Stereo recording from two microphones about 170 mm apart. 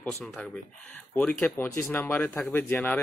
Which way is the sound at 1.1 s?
10° left (ahead or behind).